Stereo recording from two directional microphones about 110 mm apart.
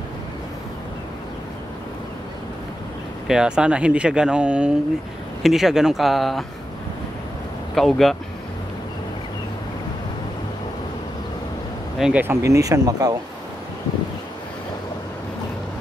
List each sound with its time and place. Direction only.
3.3 s speech: 5° right (ahead or behind)
7.7 s speech: centre (ahead or behind)
12.0 s speech: 15° right (ahead or behind)
12.4 s speech: 30° right (ahead or behind)